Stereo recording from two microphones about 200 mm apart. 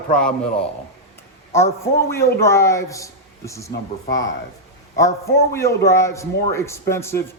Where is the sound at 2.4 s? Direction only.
15° left (ahead or behind).